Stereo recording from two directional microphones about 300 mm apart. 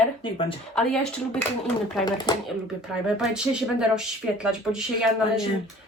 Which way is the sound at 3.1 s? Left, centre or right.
Centre.